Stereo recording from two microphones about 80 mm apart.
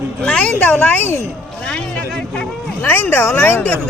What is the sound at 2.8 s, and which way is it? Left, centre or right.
Speech, left.